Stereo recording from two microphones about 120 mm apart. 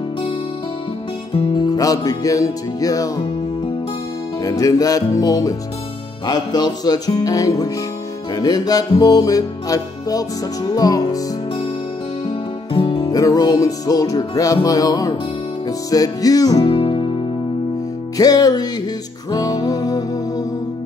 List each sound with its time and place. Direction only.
1.3 s music: 45° left (ahead or behind)
1.8 s music: 30° left (ahead or behind)
4.4 s music: 30° left (ahead or behind)
12.3 s music: 45° left (ahead or behind)
13.1 s music: 30° left (ahead or behind)
16.6 s music: 45° left (ahead or behind)
18.1 s music: 35° left (ahead or behind)